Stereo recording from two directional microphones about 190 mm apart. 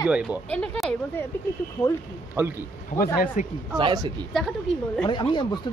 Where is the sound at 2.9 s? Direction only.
50° left (ahead or behind).